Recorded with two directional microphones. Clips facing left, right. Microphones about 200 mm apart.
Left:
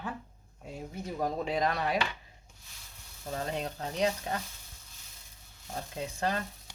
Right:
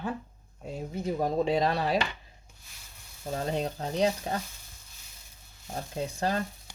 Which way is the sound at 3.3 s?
35° right (ahead or behind).